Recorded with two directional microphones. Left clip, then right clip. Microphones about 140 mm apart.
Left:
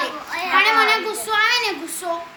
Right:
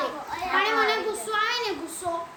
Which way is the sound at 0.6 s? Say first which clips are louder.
Left 8 dB; 25° left (ahead or behind).